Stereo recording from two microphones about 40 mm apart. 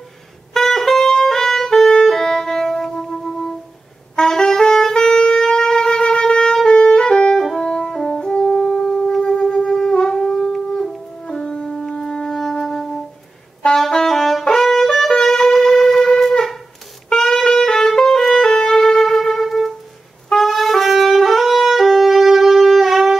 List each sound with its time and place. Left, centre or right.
0.6 s music: centre
4.2 s wind instrument: centre
7.6 s brass instrument: centre
9.4 s wind instrument: centre
10.7 s music: centre
12.0 s wind instrument: centre
12.6 s music: centre
13.7 s brass instrument: centre
15.0 s wind instrument: centre
17.1 s music: centre